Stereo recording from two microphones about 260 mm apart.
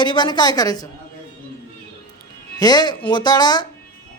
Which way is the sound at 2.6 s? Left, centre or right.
Centre.